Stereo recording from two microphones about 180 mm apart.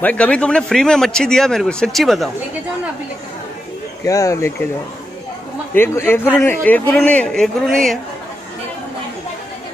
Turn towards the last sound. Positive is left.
turn(degrees=0)  # may be behind; listen again after turning